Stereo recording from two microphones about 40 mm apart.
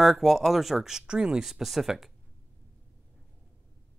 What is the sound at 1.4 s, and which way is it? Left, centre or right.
Speech, centre.